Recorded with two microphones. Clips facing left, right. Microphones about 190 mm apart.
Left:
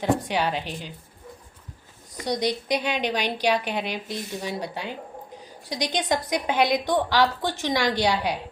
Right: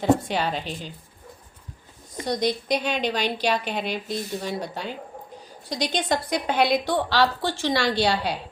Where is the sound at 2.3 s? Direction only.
15° left (ahead or behind).